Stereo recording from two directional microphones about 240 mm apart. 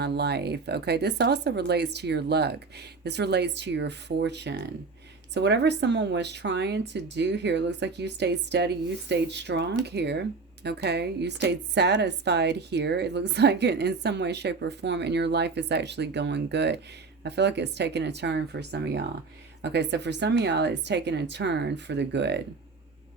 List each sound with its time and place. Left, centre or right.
0.0 s speech: right